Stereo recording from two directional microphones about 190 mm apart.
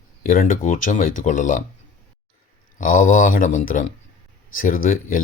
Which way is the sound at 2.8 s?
45° left (ahead or behind).